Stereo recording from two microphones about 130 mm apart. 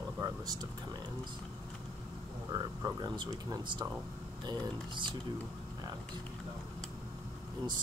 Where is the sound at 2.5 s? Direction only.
30° right (ahead or behind).